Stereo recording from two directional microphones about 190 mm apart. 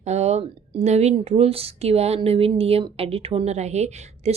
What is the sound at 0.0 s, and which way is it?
Speech, 35° right (ahead or behind).